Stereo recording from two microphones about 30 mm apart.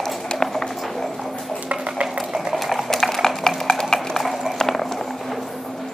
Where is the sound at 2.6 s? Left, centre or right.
Centre.